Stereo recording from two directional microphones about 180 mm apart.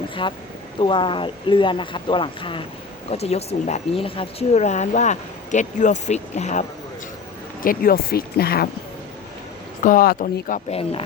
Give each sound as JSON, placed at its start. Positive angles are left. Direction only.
{"t": 0.1, "sound": "speech", "side_deg": 25}
{"t": 7.6, "sound": "speech", "side_deg": 50}
{"t": 9.8, "sound": "speech", "side_deg": 50}
{"t": 10.7, "sound": "speech", "side_deg": 30}